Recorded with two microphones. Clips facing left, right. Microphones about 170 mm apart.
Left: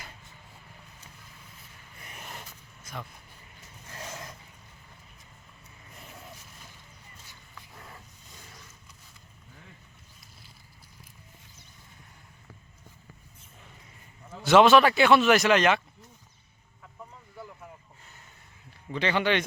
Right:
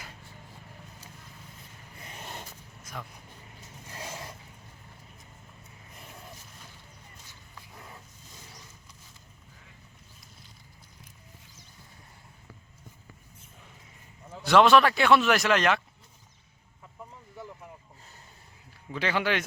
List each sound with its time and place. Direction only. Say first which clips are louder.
2.0 s a sound: right 2 dB; 25° right (ahead or behind)
7.8 s dog: right 1 dB; 5° right (ahead or behind)
14.4 s speech: left 2 dB; centre (ahead or behind)
18.9 s speech: left 2 dB; 5° right (ahead or behind)